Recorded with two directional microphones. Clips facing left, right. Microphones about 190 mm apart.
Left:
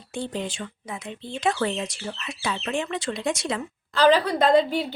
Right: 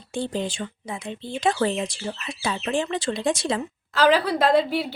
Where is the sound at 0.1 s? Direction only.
30° right (ahead or behind).